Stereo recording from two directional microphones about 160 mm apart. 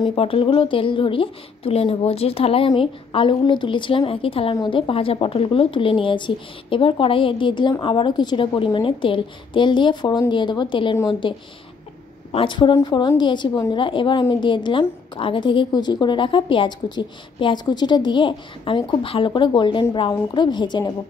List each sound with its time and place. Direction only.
0.0 s a woman's voice: 35° left (ahead or behind)